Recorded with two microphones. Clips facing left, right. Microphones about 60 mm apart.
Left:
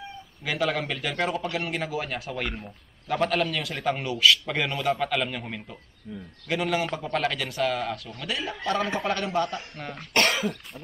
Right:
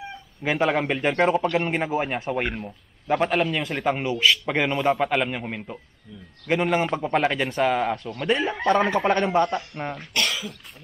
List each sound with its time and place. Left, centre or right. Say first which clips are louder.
0.4 s a man's voice: right 5 dB; right
10.1 s cough: left 5 dB; left